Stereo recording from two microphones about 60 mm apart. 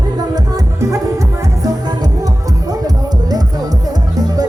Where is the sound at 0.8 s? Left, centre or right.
Right.